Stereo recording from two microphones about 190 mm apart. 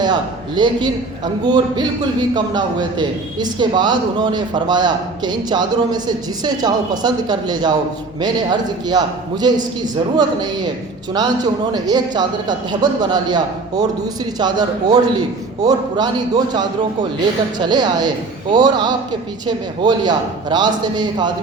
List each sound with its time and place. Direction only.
0.0 s a man's voice: 25° right (ahead or behind)
11.7 s a man's voice: 20° right (ahead or behind)